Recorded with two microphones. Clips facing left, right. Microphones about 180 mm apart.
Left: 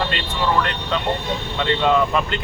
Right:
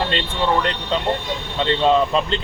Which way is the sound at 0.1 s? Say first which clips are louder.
Right 2 dB; 25° right (ahead or behind).